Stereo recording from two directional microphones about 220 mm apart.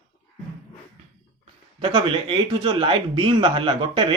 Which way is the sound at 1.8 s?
25° right (ahead or behind).